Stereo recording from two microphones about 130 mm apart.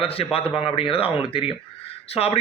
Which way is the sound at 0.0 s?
45° left (ahead or behind).